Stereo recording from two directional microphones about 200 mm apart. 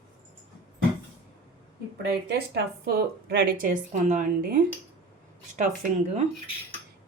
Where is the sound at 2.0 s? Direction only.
55° right (ahead or behind).